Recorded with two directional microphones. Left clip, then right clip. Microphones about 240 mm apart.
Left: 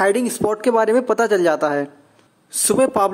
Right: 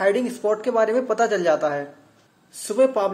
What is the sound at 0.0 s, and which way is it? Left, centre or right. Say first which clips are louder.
Speech: left 3 dB; left.